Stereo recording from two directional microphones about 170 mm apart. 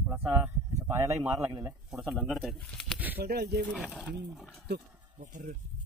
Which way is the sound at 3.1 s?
65° right (ahead or behind).